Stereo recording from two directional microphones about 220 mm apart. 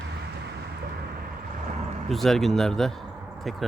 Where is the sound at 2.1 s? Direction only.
Centre (ahead or behind).